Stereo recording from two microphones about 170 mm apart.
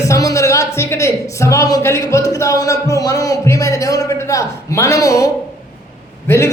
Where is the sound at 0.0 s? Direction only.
20° left (ahead or behind).